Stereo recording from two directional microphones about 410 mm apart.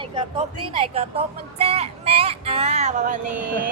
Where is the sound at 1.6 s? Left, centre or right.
Centre.